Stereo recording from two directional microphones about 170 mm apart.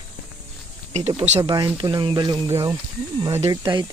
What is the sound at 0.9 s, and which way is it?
Speech, 40° right (ahead or behind).